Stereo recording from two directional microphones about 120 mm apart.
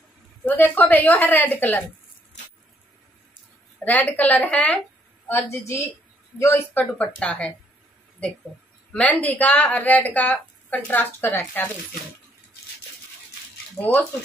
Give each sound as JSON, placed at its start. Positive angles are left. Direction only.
{"t": 0.5, "sound": "speech", "side_deg": 15}
{"t": 3.8, "sound": "a woman's voice", "side_deg": 15}
{"t": 8.9, "sound": "speech", "side_deg": 10}
{"t": 13.7, "sound": "speech", "side_deg": 15}